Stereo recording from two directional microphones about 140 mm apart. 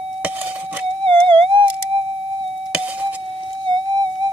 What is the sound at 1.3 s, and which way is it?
Theremin, 40° right (ahead or behind).